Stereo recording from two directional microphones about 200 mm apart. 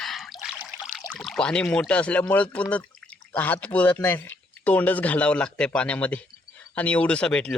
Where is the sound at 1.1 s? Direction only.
5° left (ahead or behind).